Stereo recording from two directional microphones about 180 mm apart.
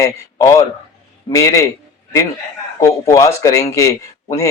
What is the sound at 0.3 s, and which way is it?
A man's voice, 20° left (ahead or behind).